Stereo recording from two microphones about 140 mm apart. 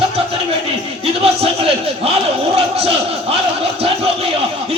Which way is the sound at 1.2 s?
45° right (ahead or behind).